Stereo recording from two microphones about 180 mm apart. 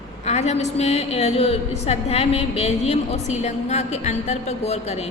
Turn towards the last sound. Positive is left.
turn(degrees=35)  # may be behind; listen again after turning